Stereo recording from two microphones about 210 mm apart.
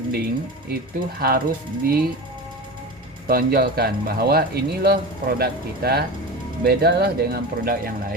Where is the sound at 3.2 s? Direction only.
45° right (ahead or behind).